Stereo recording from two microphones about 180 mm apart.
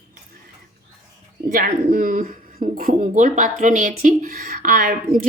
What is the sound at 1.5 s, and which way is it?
Speech, 55° right (ahead or behind).